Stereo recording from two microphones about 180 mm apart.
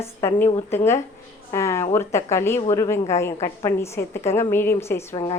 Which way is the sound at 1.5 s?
15° left (ahead or behind).